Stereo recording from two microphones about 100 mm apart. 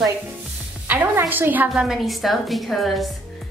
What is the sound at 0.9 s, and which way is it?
Speech, 20° right (ahead or behind).